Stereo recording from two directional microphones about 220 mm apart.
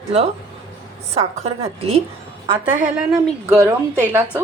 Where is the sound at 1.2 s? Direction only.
25° right (ahead or behind).